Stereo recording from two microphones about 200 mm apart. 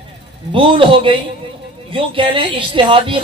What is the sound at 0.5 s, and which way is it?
A man's voice, 25° right (ahead or behind).